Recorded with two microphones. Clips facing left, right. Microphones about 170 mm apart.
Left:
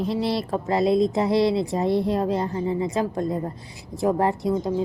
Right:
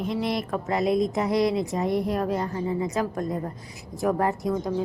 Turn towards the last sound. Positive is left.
turn(degrees=25)  # may be behind; listen again after turning